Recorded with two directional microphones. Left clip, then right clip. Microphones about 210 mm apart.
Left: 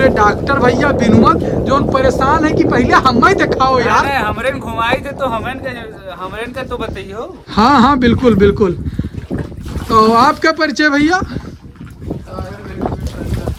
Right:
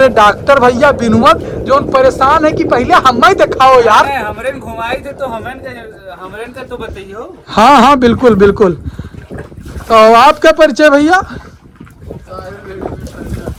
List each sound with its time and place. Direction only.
0.0 s speech: 10° left (ahead or behind)
6.7 s speech: 35° left (ahead or behind)
7.5 s speech: 10° left (ahead or behind)
10.6 s speech: 5° left (ahead or behind)